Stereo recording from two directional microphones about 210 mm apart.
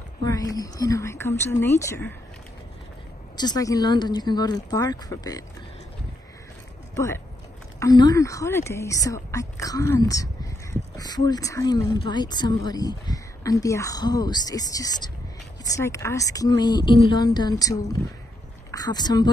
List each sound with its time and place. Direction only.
0.2 s speech: 15° left (ahead or behind)
3.3 s speech: 20° left (ahead or behind)
7.8 s speech: 20° left (ahead or behind)